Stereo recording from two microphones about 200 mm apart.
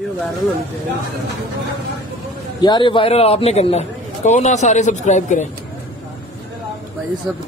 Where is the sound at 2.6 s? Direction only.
20° left (ahead or behind).